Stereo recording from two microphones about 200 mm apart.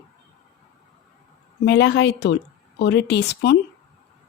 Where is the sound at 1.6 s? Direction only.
60° left (ahead or behind).